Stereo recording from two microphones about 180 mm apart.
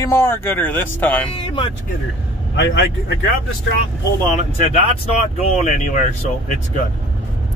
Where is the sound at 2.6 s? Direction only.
80° left.